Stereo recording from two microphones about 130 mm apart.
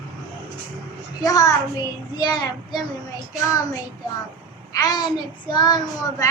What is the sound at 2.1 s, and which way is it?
Child singing, 30° left (ahead or behind).